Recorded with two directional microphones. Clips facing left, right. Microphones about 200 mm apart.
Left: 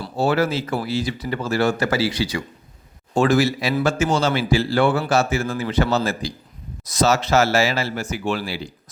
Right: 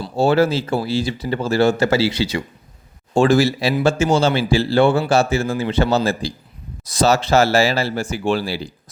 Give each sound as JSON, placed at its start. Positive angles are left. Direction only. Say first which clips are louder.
{"t": 0.0, "sound": "speech", "louder": "right 4 dB", "side_deg": -30}